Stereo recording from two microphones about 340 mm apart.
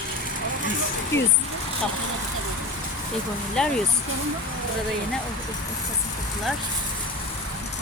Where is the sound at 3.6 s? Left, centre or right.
Centre.